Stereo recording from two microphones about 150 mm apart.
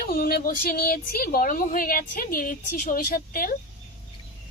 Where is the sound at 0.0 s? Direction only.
80° left.